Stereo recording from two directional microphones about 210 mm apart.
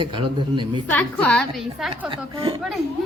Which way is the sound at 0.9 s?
5° left (ahead or behind).